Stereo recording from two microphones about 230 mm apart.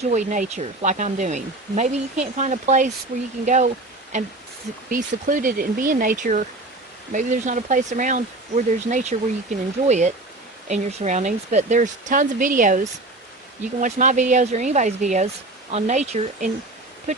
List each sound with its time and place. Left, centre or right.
0.0 s speech: right
13.8 s speech: right